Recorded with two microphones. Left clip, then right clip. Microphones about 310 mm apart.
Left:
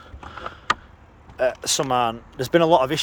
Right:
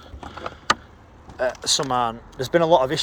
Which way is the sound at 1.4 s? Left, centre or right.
Centre.